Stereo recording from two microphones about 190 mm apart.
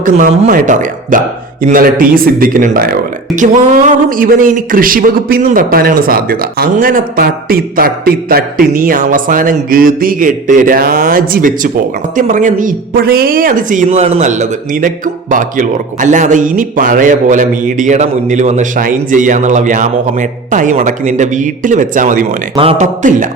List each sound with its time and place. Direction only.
0.0 s speech: 45° right (ahead or behind)
22.5 s speech: 30° right (ahead or behind)
23.0 s speech: 40° right (ahead or behind)